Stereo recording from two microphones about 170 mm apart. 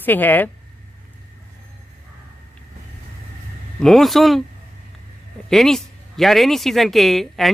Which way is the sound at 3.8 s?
Centre (ahead or behind).